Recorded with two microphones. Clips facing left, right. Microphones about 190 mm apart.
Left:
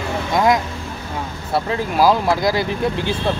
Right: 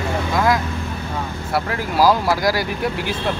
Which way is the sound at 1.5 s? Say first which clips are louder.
Left 3 dB; 20° left (ahead or behind).